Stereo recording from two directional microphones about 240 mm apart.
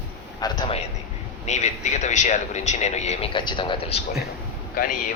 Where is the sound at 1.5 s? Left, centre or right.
Left.